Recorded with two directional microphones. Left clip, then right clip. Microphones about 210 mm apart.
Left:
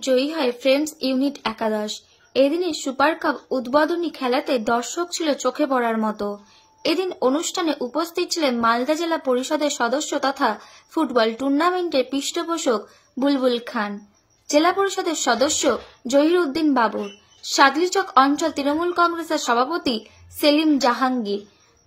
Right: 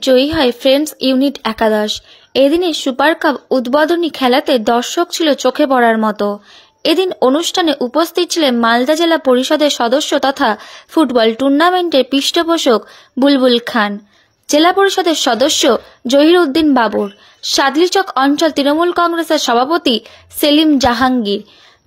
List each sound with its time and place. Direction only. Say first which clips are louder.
0.0 s speech: right 9 dB; 35° right (ahead or behind)